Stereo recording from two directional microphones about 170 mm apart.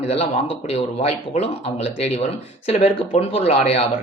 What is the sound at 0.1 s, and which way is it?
Speech, 35° left (ahead or behind).